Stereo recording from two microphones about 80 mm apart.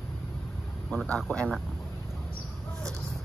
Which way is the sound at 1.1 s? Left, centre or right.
Centre.